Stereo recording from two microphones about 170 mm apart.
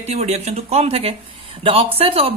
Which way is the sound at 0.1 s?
40° right (ahead or behind).